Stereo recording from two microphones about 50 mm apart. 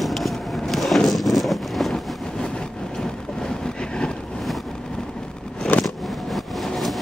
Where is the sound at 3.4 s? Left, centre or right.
Centre.